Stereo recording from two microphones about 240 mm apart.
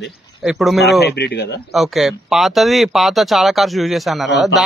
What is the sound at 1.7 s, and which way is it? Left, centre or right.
Speech, centre.